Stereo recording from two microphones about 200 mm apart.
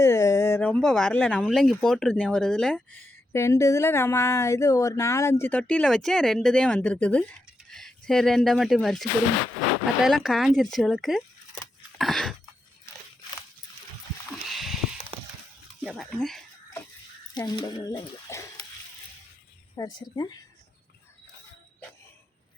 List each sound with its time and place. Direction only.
0.0 s speech: 15° left (ahead or behind)
3.3 s speech: 15° left (ahead or behind); by 11.6 s centre (ahead or behind)
11.9 s a sound: centre (ahead or behind)
14.4 s a sound: centre (ahead or behind)
15.8 s speech: centre (ahead or behind)
17.3 s speech: 20° left (ahead or behind)
19.8 s speech: 15° left (ahead or behind)